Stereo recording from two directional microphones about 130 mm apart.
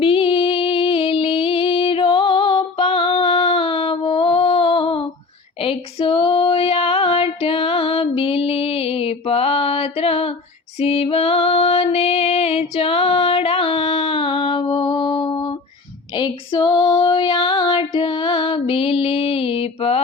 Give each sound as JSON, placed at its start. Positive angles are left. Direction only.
{"t": 0.0, "sound": "music", "side_deg": 45}
{"t": 5.6, "sound": "female singing", "side_deg": 45}
{"t": 10.8, "sound": "music", "side_deg": 50}
{"t": 16.1, "sound": "female singing", "side_deg": 35}